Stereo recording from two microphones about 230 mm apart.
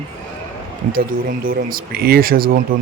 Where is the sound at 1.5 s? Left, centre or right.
Right.